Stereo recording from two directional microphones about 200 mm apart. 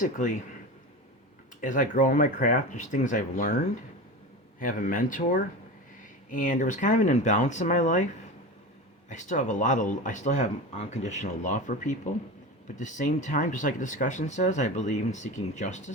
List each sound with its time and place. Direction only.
0.0 s speech: 40° left (ahead or behind)
1.6 s speech: 40° left (ahead or behind)
4.6 s speech: 40° left (ahead or behind)
9.0 s speech: 40° left (ahead or behind)